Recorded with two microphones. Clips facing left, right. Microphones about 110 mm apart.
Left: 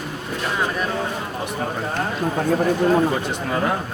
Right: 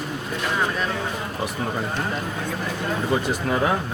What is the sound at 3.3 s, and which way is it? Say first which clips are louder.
Speech: even; 5° right (ahead or behind).